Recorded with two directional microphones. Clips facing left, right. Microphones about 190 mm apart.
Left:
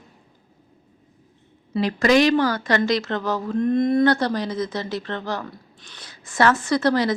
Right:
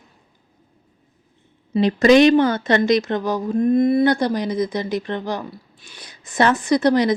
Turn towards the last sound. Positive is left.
turn(degrees=-15)  # may be behind; listen again after turning